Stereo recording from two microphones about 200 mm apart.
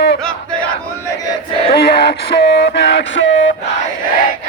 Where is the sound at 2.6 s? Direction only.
60° left (ahead or behind).